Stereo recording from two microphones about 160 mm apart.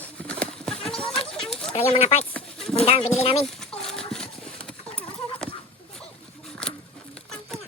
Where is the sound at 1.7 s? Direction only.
40° left (ahead or behind).